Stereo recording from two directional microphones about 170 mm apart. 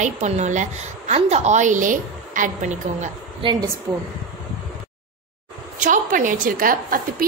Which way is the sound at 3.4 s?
25° right (ahead or behind).